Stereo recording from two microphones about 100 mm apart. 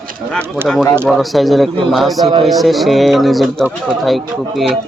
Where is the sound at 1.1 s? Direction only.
Centre (ahead or behind).